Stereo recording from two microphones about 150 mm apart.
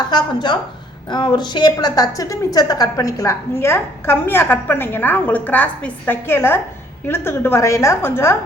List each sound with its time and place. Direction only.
0.0 s a woman's voice: 30° left (ahead or behind)